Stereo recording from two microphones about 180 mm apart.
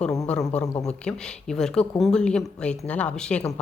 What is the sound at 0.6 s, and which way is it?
Speech, 20° left (ahead or behind).